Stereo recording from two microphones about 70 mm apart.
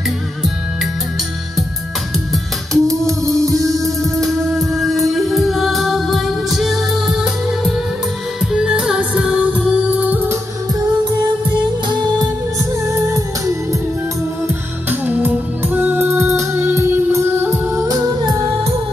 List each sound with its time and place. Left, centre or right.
2.7 s music: centre
8.5 s music: centre
12.8 s music: right
14.9 s music: right
17.8 s music: right